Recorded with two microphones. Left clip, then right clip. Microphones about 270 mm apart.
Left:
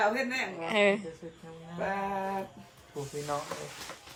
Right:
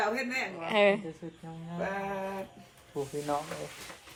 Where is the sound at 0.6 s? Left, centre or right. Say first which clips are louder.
Right 1 dB; centre.